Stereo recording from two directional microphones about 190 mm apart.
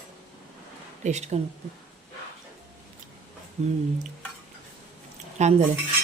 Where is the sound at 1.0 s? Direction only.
35° right (ahead or behind).